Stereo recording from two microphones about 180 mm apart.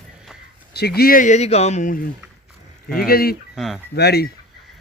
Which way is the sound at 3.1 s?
55° left (ahead or behind).